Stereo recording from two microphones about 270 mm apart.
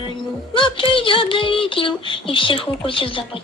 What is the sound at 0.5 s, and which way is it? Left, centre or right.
Child singing, centre.